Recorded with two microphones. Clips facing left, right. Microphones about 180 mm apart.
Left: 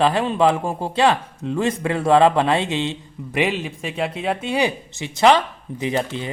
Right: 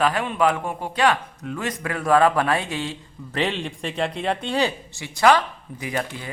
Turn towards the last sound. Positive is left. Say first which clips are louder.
# left 5 dB
turn(degrees=20)  # may be behind; listen again after turning